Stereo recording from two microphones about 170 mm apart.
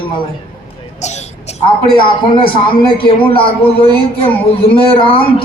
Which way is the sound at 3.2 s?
30° left (ahead or behind).